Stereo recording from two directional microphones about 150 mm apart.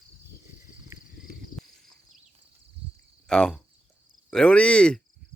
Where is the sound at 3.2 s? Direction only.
5° left (ahead or behind).